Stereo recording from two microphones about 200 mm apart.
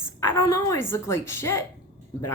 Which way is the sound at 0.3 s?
15° left (ahead or behind).